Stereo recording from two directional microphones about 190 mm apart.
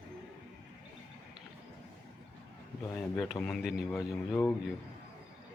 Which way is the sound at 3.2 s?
5° left (ahead or behind).